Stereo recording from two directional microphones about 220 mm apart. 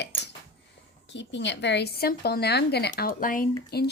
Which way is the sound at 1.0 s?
55° left (ahead or behind).